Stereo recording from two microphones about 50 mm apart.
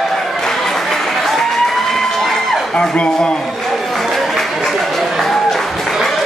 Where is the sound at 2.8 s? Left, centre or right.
Centre.